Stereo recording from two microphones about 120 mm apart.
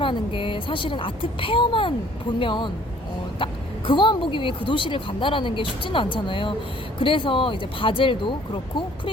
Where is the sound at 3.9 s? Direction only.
40° left (ahead or behind).